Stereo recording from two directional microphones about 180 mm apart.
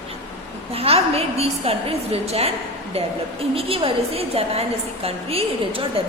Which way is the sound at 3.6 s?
30° right (ahead or behind).